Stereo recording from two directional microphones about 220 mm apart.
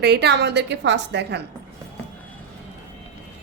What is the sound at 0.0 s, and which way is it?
A woman's voice, 50° right (ahead or behind).